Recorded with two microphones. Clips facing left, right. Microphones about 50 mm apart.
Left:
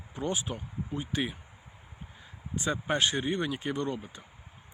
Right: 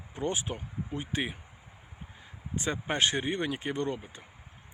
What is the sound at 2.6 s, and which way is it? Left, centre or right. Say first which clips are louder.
Speech: left 1 dB; right.